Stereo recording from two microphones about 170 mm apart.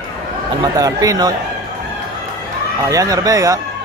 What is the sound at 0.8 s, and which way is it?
Speech, 20° right (ahead or behind).